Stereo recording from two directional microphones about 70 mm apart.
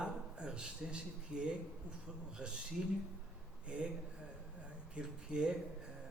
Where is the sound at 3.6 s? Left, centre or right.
Centre.